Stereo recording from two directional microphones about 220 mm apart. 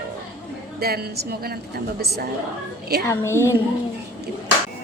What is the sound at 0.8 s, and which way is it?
Speech, 45° right (ahead or behind).